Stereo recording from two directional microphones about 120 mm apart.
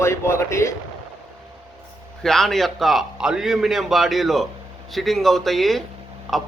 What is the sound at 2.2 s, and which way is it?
A man's voice, centre (ahead or behind).